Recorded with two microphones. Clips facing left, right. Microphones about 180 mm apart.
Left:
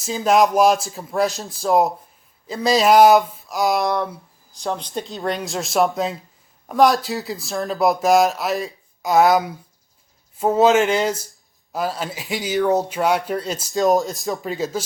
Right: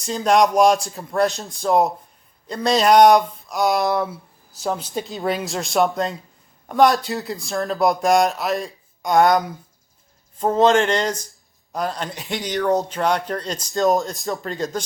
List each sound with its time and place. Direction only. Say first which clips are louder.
0.0 s speech: even; centre (ahead or behind)